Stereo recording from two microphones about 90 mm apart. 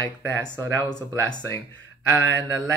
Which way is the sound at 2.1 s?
20° right (ahead or behind).